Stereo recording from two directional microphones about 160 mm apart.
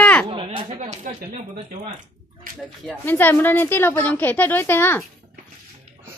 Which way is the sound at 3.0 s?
10° left (ahead or behind).